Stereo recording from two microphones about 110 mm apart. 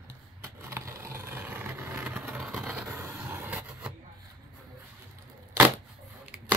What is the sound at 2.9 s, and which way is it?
Vehicle, 25° right (ahead or behind).